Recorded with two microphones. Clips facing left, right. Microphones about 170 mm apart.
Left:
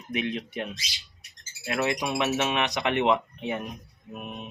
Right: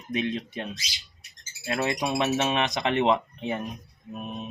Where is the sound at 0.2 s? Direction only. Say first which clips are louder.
Even; 30° right (ahead or behind).